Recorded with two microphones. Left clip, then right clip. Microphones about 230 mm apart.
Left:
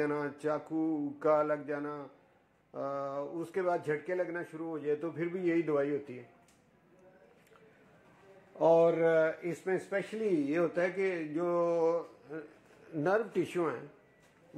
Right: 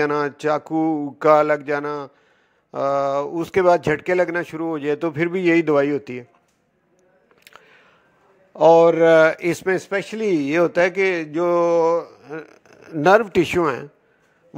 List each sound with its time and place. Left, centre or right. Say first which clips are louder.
0.0 s a man's voice: right 13 dB; right
8.5 s a man's voice: right 13 dB; right